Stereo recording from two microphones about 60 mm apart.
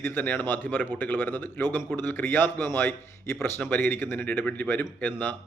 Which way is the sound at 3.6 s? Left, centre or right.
Left.